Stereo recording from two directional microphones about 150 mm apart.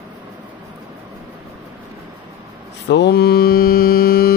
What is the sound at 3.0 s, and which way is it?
Mantra, 90° left.